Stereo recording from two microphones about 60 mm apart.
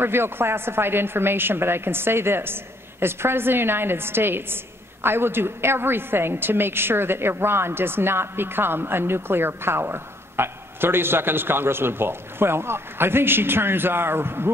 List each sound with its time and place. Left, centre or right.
0.0 s a woman's voice: right